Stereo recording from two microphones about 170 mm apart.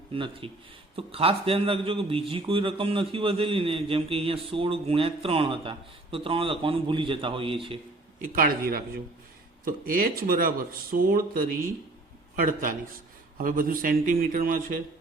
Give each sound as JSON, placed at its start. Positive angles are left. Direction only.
{"t": 0.1, "sound": "a man's voice", "side_deg": -30}
{"t": 8.2, "sound": "a man's voice", "side_deg": -55}